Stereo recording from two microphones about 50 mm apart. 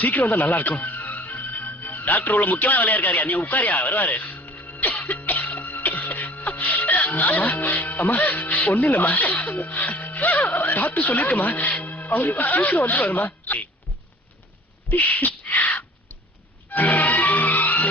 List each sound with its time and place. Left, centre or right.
0.0 s speech: left
0.9 s music: left
6.4 s music: left
6.8 s speech: left
10.6 s a sound: left
11.7 s speech: left
14.8 s sneeze: left
16.7 s music: left